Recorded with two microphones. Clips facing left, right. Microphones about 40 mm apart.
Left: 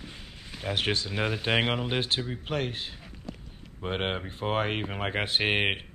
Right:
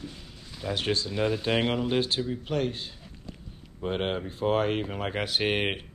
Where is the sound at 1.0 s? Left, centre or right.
Left.